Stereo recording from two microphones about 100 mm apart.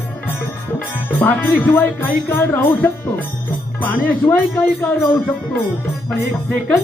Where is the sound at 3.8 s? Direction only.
15° left (ahead or behind).